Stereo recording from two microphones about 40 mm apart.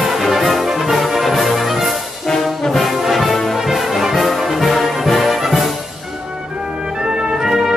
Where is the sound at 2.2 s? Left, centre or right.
Centre.